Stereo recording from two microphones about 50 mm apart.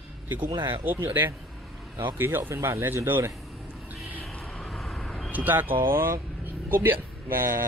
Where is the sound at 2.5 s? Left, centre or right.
Right.